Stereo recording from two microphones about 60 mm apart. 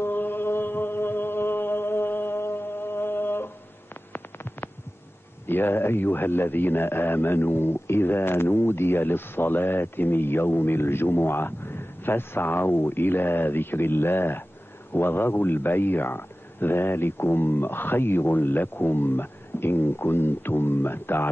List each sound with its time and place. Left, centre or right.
0.0 s mantra: left
4.1 s a sound: left
5.5 s a man's voice: left